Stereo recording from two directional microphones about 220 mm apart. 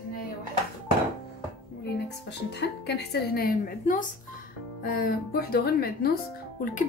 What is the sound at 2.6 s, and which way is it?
Speech, 50° left (ahead or behind).